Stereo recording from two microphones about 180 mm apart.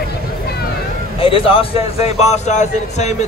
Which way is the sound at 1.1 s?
30° left (ahead or behind).